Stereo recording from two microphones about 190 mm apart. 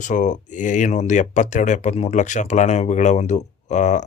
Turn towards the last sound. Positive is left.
turn(degrees=40)  # may be behind; listen again after turning